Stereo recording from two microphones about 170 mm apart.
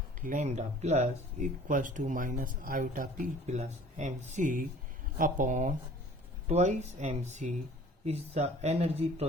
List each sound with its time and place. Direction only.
0.2 s speech: 50° right (ahead or behind)